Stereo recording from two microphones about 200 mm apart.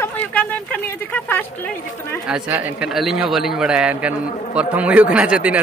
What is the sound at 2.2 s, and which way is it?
A man's voice, 5° right (ahead or behind).